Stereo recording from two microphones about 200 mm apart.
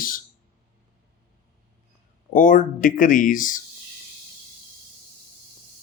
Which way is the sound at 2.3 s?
40° left (ahead or behind).